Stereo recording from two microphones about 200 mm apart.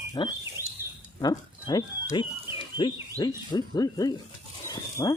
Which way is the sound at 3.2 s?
20° left (ahead or behind).